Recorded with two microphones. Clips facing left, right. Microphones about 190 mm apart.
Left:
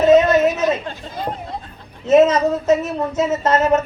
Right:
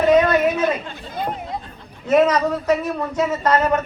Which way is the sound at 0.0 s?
25° left (ahead or behind).